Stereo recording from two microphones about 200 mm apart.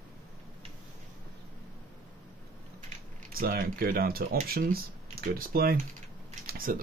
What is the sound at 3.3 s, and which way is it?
Speech, 45° right (ahead or behind).